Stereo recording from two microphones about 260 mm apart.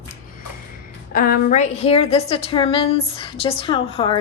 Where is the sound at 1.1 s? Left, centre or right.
Left.